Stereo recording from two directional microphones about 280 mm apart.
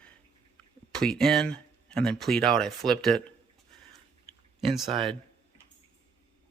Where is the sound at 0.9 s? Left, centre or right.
Centre.